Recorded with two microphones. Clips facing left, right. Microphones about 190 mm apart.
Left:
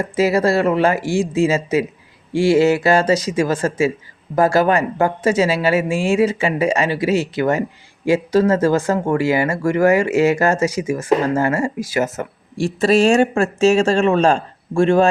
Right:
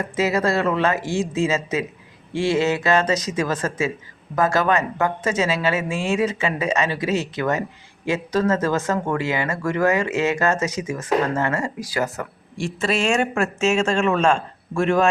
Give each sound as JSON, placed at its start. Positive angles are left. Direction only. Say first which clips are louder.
{"t": 0.0, "sound": "speech", "louder": "left 5 dB", "side_deg": 30}
{"t": 12.5, "sound": "speech", "louder": "left 8 dB", "side_deg": 35}